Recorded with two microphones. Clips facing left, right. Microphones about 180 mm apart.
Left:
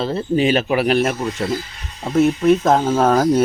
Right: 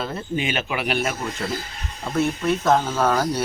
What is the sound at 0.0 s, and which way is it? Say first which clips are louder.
Speech: left 8 dB; 35° left (ahead or behind).